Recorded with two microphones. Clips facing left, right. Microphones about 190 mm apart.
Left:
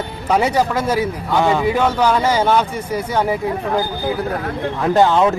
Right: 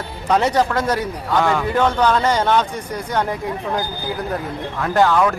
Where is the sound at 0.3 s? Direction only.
10° left (ahead or behind).